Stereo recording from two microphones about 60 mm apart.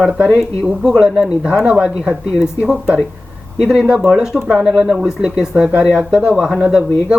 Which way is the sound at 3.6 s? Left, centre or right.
Centre.